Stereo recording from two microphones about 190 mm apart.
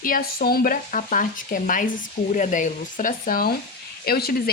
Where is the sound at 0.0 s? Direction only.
50° left (ahead or behind).